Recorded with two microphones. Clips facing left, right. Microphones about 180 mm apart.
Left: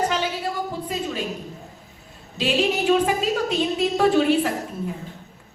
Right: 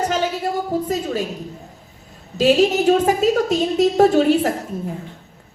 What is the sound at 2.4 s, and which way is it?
A woman's voice, 40° right (ahead or behind).